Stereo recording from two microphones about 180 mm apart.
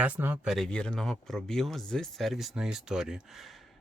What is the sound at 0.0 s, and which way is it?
Speech, 10° right (ahead or behind).